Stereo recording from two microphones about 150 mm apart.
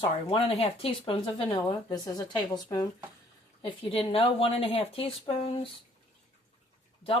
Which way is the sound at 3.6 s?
40° left (ahead or behind).